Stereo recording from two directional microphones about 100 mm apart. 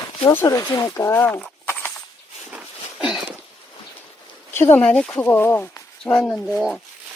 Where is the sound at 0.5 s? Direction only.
35° left (ahead or behind).